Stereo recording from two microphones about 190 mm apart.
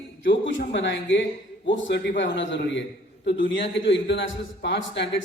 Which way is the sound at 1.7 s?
80° left.